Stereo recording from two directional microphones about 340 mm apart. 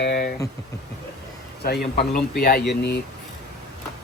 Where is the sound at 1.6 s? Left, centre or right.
Left.